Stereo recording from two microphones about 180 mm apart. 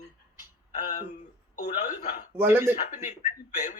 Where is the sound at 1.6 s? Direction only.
45° left (ahead or behind).